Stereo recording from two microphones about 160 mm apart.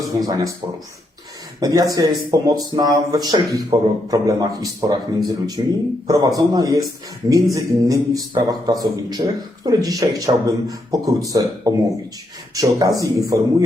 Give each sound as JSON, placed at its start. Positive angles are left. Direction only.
{"t": 0.0, "sound": "speech", "side_deg": -25}
{"t": 1.5, "sound": "a man's voice", "side_deg": -20}